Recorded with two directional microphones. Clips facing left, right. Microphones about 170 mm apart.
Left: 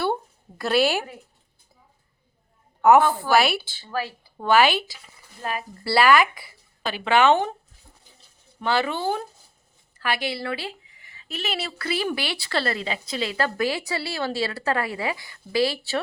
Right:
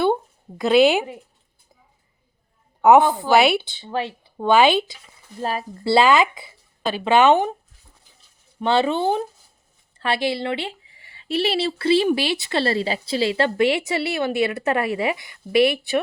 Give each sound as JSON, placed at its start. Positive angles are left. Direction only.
{"t": 0.6, "sound": "speech", "side_deg": -20}
{"t": 2.8, "sound": "speech", "side_deg": -20}
{"t": 8.6, "sound": "speech", "side_deg": -25}